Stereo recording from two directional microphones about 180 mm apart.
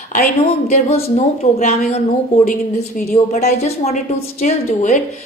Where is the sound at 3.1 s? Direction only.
40° left (ahead or behind).